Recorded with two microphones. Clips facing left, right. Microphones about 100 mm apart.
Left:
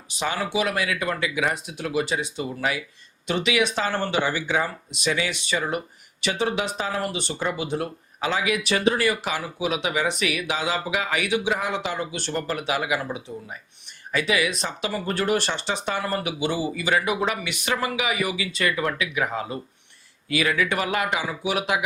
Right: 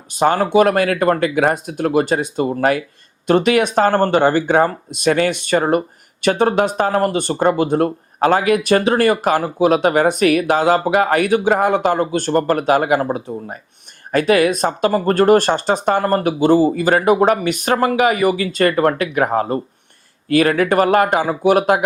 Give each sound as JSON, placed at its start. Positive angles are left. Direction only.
{"t": 0.1, "sound": "speech", "side_deg": -50}